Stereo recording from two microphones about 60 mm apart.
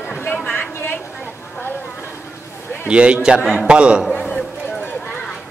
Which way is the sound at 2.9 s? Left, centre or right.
Centre.